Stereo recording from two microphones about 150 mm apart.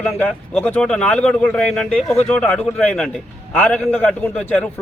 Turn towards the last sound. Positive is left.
turn(degrees=10)  # may be behind; listen again after turning